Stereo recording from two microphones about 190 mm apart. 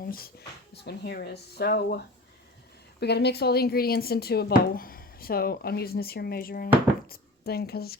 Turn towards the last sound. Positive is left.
turn(degrees=55)  # may be behind; listen again after turning